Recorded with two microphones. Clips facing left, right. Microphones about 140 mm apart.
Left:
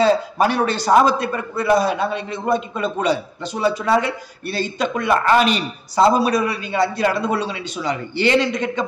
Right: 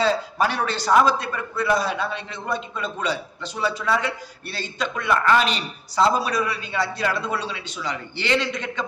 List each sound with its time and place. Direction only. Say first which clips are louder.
0.0 s a man's voice: left 5 dB; 50° left (ahead or behind)